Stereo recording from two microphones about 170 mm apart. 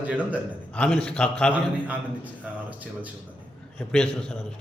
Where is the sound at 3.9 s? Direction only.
5° left (ahead or behind).